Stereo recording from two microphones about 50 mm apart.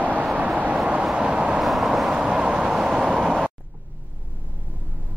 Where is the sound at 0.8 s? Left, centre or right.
Centre.